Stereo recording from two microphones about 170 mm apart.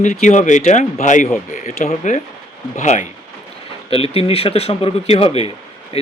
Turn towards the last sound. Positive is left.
turn(degrees=35)  # may be behind; listen again after turning